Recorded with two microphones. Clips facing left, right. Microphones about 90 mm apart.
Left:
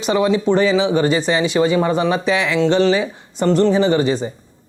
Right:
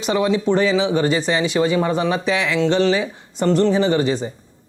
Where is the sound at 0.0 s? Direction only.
15° left (ahead or behind).